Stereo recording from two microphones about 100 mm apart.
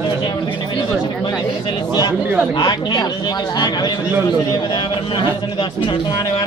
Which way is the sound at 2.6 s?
45° left (ahead or behind).